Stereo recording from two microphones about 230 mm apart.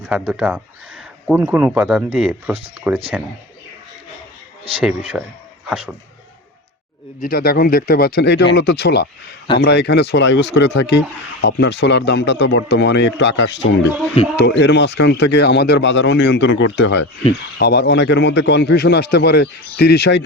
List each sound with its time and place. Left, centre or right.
0.1 s speech: centre
4.8 s speech: centre
7.2 s speech: left